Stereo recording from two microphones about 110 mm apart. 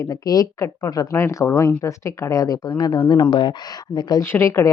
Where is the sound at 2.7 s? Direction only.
45° left (ahead or behind).